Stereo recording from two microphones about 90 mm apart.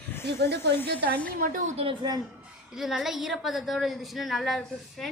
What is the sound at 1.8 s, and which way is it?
Speech, 90° right.